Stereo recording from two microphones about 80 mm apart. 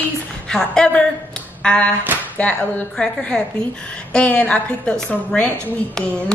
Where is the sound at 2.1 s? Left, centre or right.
Right.